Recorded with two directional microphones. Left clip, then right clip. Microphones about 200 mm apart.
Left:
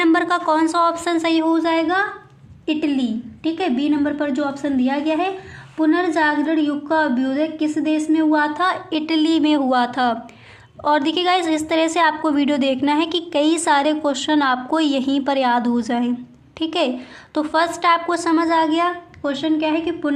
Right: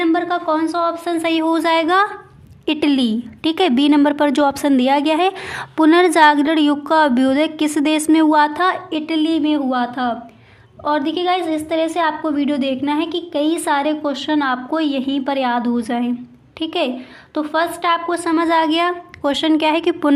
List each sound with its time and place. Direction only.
0.0 s a woman's voice: 10° left (ahead or behind)
1.2 s speech: 10° right (ahead or behind)
1.5 s a woman's voice: 30° right (ahead or behind)
8.9 s a woman's voice: 5° right (ahead or behind)
18.4 s a woman's voice: 15° right (ahead or behind)
19.2 s a woman's voice: 35° right (ahead or behind)